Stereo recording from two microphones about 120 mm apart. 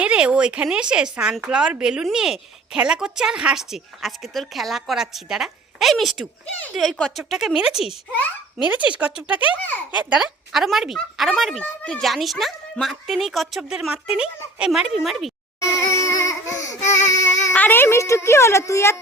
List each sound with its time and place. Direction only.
0.0 s speech: 10° right (ahead or behind)
15.9 s a sound: 25° left (ahead or behind)
17.1 s child singing: 25° left (ahead or behind)
17.5 s a woman's voice: 15° left (ahead or behind)